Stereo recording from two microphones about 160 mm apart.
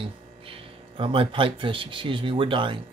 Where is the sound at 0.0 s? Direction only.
35° right (ahead or behind).